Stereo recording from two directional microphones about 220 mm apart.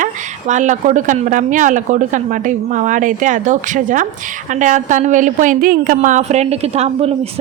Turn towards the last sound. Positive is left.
turn(degrees=-30)  # may be behind; listen again after turning